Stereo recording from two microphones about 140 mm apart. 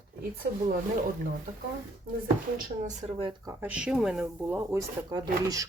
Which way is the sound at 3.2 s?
35° right (ahead or behind).